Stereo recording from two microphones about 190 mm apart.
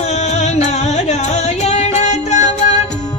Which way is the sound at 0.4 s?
35° left (ahead or behind).